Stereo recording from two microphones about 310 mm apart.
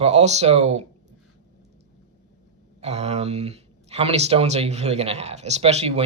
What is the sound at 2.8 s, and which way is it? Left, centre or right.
Speech, right.